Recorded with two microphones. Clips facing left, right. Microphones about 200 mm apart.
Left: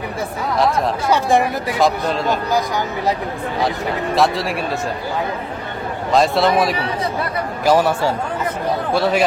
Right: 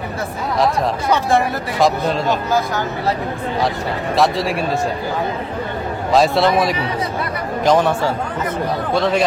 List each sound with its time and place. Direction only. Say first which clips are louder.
0.6 s speech: even; centre (ahead or behind)
2.5 s speech: even; 15° left (ahead or behind)
3.6 s speech: left 2 dB; centre (ahead or behind)
6.1 s speech: right 1 dB; centre (ahead or behind)